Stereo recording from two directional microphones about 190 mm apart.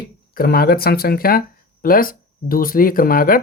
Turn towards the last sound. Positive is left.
turn(degrees=50)  # may be behind; listen again after turning